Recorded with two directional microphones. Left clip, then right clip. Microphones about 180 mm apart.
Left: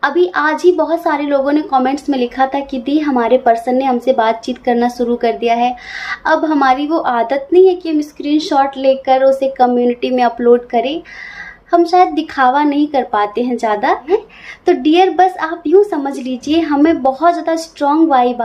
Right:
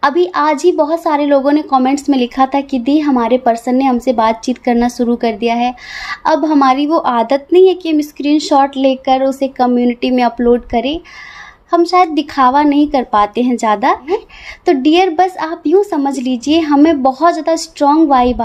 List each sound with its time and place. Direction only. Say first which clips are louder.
0.0 s a woman's voice: right 1 dB; 45° right (ahead or behind)